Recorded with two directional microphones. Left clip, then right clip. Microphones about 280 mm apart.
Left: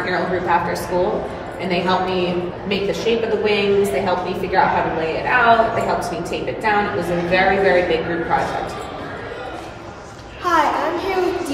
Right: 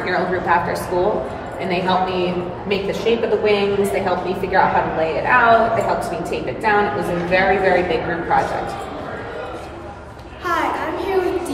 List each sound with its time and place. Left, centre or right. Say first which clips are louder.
0.0 s a woman's voice: right 1 dB; centre